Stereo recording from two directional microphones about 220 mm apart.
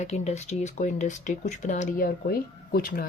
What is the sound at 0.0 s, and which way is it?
Speech, 30° left (ahead or behind).